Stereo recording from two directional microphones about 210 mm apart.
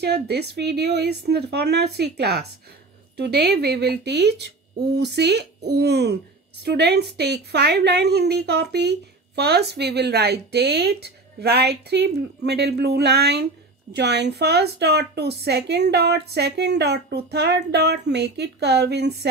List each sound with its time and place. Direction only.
0.0 s a woman's voice: 50° right (ahead or behind)